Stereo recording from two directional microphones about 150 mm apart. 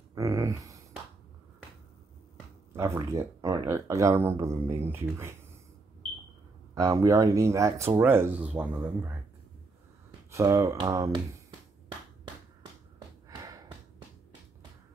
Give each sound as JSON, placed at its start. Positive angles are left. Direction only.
{"t": 0.1, "sound": "speech", "side_deg": -20}
{"t": 2.7, "sound": "speech", "side_deg": -20}
{"t": 6.7, "sound": "speech", "side_deg": -20}
{"t": 10.3, "sound": "speech", "side_deg": -20}